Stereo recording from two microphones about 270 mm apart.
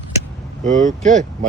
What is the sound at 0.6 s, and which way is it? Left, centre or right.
Speech, right.